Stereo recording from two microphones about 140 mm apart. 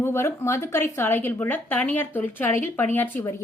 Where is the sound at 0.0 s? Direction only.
20° left (ahead or behind).